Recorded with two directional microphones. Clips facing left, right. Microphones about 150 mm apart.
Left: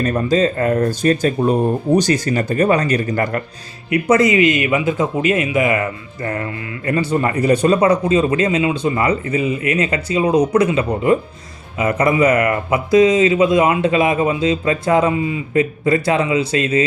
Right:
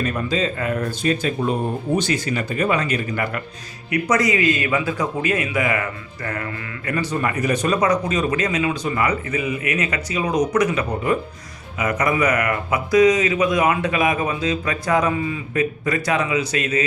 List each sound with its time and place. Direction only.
0.0 s speech: 40° left (ahead or behind)
3.8 s speech: 25° left (ahead or behind)